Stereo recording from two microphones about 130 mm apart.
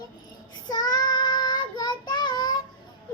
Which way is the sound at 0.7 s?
30° left (ahead or behind).